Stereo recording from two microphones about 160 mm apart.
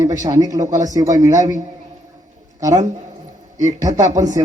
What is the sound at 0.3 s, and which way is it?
Speech, 20° right (ahead or behind).